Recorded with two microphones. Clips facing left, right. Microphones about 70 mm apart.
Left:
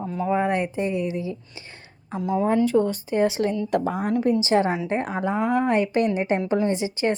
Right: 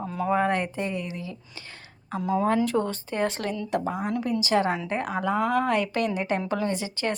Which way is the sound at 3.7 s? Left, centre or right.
Left.